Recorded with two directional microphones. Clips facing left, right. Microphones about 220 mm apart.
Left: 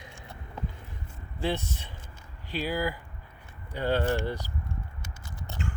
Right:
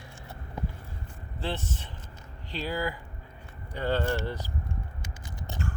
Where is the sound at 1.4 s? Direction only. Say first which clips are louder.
Left 3 dB; 10° left (ahead or behind).